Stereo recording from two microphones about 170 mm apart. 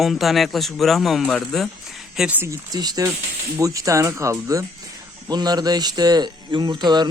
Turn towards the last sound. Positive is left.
turn(degrees=-25)  # may be behind; listen again after turning